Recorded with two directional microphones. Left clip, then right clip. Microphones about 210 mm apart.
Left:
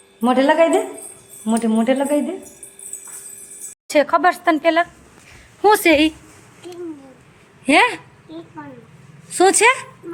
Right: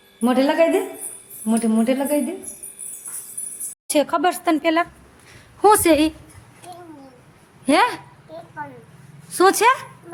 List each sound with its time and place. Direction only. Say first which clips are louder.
0.2 s speech: left 3 dB; 5° right (ahead or behind)
3.8 s speech: left 4 dB; 15° right (ahead or behind)
7.6 s speech: left 3 dB; 10° right (ahead or behind)
9.4 s speech: left 2 dB; 15° right (ahead or behind)